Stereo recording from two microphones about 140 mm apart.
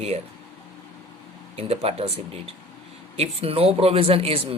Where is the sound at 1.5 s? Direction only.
45° right (ahead or behind).